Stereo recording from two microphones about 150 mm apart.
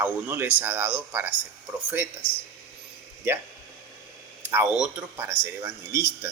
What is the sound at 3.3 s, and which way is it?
Speech, 15° right (ahead or behind).